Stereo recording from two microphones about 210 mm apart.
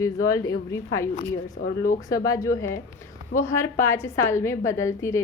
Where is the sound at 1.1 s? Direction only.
45° left (ahead or behind).